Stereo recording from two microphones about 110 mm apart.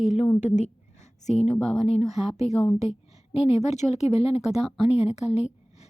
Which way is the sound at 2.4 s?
85° left.